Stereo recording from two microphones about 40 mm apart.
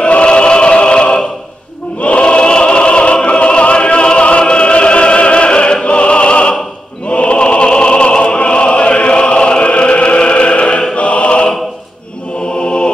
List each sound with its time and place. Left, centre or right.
0.0 s choir: left
7.1 s opera: left
11.0 s music: left
12.6 s mantra: left